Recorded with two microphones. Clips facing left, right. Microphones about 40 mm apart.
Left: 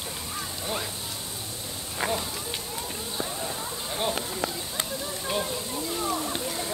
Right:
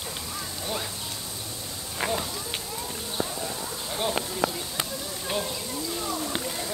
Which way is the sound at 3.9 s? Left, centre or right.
Centre.